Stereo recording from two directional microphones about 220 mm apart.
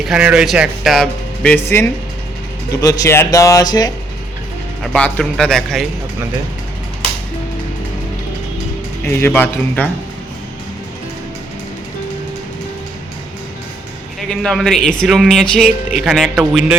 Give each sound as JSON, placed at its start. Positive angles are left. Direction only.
{"t": 0.0, "sound": "speech", "side_deg": -5}
{"t": 4.8, "sound": "speech", "side_deg": 5}
{"t": 9.0, "sound": "speech", "side_deg": 10}
{"t": 14.2, "sound": "speech", "side_deg": 5}